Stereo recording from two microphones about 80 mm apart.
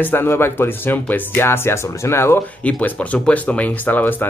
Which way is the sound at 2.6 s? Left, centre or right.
Centre.